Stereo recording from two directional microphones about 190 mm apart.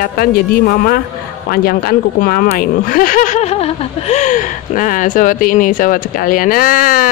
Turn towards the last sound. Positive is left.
turn(degrees=45)  # may be behind; listen again after turning